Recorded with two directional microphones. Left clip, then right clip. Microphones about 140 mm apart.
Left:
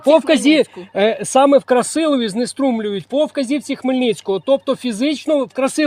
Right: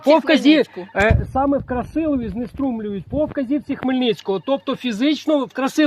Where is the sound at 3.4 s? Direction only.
25° left (ahead or behind).